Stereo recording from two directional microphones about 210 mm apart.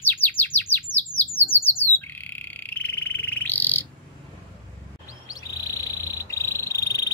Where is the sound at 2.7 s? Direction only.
10° left (ahead or behind).